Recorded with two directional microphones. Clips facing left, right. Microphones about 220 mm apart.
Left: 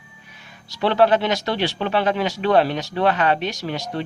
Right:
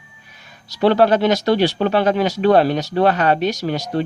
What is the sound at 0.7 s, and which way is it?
Speech, 40° right (ahead or behind).